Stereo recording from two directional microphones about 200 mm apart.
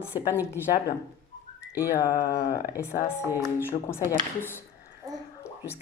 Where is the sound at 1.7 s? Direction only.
15° left (ahead or behind).